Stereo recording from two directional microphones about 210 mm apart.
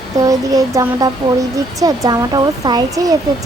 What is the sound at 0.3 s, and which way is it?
Speech, 15° right (ahead or behind).